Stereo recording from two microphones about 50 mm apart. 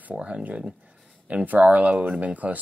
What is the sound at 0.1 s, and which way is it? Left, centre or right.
Speech, right.